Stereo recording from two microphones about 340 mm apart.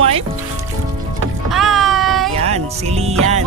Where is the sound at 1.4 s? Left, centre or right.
Centre.